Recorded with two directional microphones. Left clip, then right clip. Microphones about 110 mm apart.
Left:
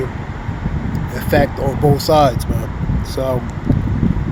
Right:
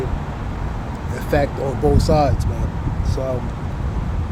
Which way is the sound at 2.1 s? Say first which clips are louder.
Left 6 dB; 25° left (ahead or behind).